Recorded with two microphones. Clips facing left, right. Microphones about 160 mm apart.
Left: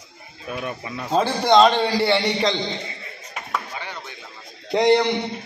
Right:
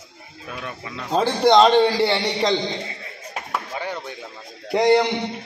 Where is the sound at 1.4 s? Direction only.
15° right (ahead or behind).